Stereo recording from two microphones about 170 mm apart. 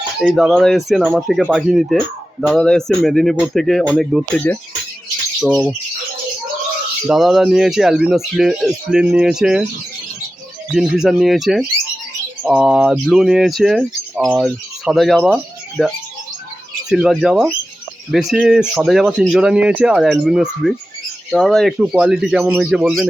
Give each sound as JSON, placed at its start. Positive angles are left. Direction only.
{"t": 0.2, "sound": "speech", "side_deg": 0}
{"t": 7.1, "sound": "speech", "side_deg": 0}
{"t": 10.8, "sound": "speech", "side_deg": -5}